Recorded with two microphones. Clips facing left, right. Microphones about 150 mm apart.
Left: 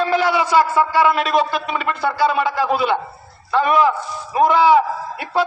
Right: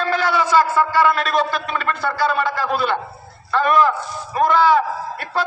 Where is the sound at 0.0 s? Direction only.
15° left (ahead or behind).